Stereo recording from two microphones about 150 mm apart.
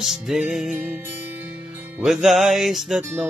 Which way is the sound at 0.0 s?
5° right (ahead or behind).